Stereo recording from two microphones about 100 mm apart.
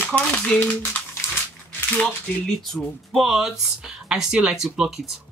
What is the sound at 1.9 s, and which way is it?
Speech, 5° left (ahead or behind).